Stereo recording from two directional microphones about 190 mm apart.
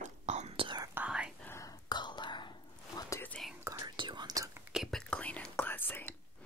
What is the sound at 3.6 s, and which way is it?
Whispering, 25° right (ahead or behind).